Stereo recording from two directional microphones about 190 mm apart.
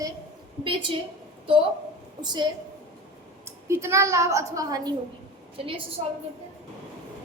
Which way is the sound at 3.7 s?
15° right (ahead or behind).